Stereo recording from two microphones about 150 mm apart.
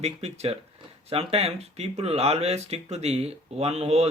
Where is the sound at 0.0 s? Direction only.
45° right (ahead or behind).